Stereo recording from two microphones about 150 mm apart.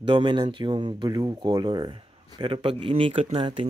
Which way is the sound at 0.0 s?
30° right (ahead or behind).